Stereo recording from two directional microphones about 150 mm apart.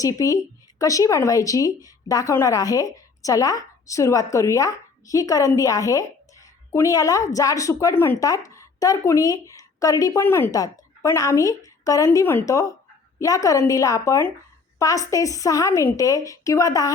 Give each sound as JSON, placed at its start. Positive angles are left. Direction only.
{"t": 0.0, "sound": "a woman's voice", "side_deg": 20}